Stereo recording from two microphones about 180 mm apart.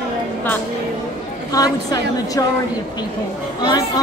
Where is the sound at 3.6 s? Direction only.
20° left (ahead or behind).